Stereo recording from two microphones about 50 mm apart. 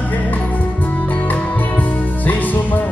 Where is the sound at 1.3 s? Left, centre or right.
Left.